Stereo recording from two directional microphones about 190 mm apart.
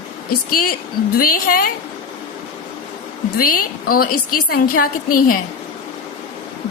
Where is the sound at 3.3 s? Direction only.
50° left (ahead or behind).